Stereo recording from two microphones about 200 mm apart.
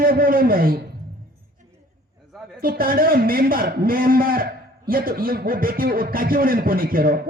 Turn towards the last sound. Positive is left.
turn(degrees=-45)  # may be behind; listen again after turning